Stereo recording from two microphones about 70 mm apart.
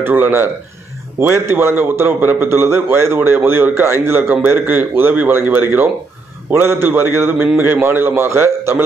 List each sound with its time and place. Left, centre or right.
0.0 s a man's voice: right